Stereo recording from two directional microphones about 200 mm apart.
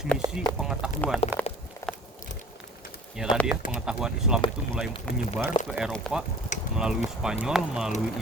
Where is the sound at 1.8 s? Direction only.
15° left (ahead or behind).